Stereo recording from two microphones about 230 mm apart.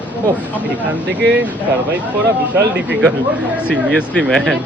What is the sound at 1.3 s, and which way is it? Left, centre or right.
Speech, centre.